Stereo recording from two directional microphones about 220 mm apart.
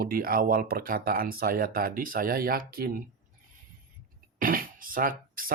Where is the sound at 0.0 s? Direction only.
40° right (ahead or behind).